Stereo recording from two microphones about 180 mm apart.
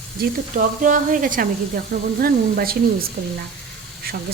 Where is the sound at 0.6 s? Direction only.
45° right (ahead or behind).